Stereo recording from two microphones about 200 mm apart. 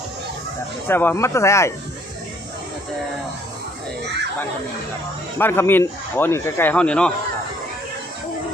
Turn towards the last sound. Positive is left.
turn(degrees=5)  # may be behind; listen again after turning